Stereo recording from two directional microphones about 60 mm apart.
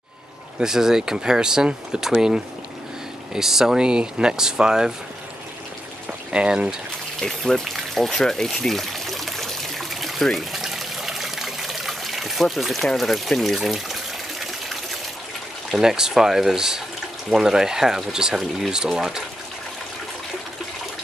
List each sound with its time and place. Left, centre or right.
0.6 s speech: centre
6.0 s pour: centre
7.2 s pour: centre
15.7 s speech: centre